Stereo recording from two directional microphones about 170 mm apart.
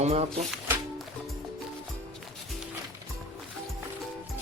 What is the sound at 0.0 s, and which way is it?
Speech, 40° right (ahead or behind).